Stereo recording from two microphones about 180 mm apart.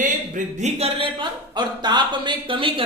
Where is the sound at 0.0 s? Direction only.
45° right (ahead or behind).